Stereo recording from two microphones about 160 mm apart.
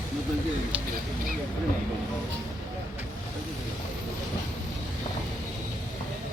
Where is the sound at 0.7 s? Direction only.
5° right (ahead or behind).